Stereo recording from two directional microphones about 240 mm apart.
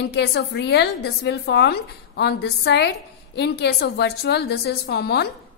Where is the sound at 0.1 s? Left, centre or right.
Left.